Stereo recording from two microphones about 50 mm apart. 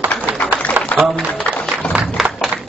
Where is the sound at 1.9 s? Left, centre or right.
Centre.